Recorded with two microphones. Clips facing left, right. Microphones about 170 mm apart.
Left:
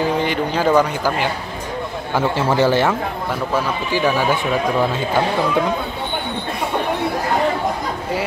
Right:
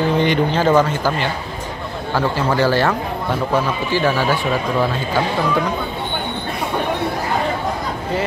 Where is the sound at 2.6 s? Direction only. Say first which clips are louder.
Left 1 dB; 20° left (ahead or behind).